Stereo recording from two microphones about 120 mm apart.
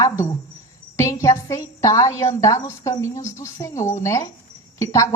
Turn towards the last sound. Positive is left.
turn(degrees=25)  # may be behind; listen again after turning